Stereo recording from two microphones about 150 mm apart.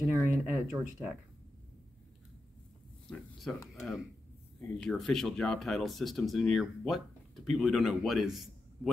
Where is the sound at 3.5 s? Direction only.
5° left (ahead or behind).